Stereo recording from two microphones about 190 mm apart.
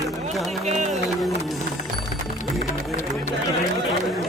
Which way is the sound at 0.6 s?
35° right (ahead or behind).